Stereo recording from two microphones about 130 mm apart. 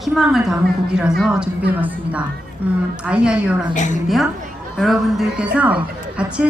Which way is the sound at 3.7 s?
70° left (ahead or behind).